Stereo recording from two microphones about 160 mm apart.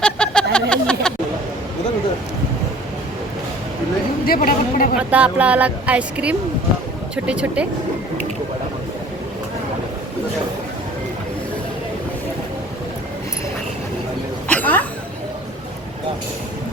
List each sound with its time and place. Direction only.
0.0 s a sound: 5° left (ahead or behind)
4.3 s speech: 65° left (ahead or behind)
4.9 s speech: 10° right (ahead or behind)
14.4 s cough: 10° left (ahead or behind)